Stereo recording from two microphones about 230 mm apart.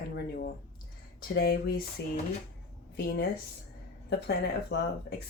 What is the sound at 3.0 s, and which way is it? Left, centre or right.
A woman's voice, left.